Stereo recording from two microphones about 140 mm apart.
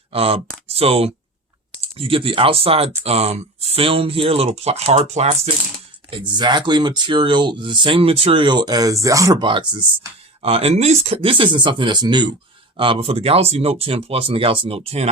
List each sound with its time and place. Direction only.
0.1 s speech: 45° right (ahead or behind)
6.1 s speech: 40° right (ahead or behind)
9.4 s speech: 35° right (ahead or behind)
10.4 s speech: 45° right (ahead or behind)